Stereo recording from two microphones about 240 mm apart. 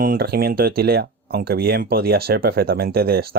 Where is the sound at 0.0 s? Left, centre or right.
Right.